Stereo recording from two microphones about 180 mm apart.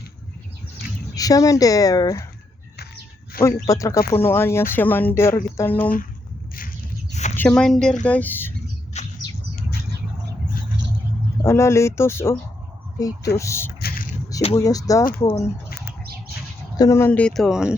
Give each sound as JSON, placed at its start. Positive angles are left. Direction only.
{"t": 1.1, "sound": "speech", "side_deg": 20}
{"t": 3.4, "sound": "speech", "side_deg": 15}
{"t": 7.1, "sound": "a sound", "side_deg": 40}
{"t": 7.3, "sound": "speech", "side_deg": 5}
{"t": 8.9, "sound": "bird", "side_deg": 40}
{"t": 11.4, "sound": "speech", "side_deg": 15}
{"t": 13.7, "sound": "a sound", "side_deg": 55}
{"t": 14.6, "sound": "speech", "side_deg": 20}
{"t": 16.7, "sound": "speech", "side_deg": 20}